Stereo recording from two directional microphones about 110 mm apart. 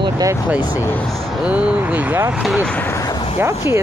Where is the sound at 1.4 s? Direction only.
10° right (ahead or behind).